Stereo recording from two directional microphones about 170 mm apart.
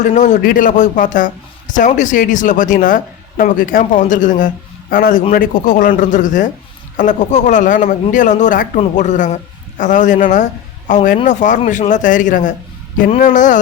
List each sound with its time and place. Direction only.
0.0 s speech: 50° left (ahead or behind)